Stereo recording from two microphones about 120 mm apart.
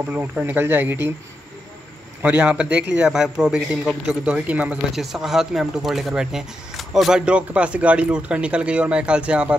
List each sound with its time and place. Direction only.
0.0 s a man's voice: 15° right (ahead or behind)
2.2 s a man's voice: 10° right (ahead or behind)